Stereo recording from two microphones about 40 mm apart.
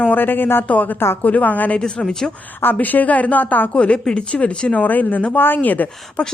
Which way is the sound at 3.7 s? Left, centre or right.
Left.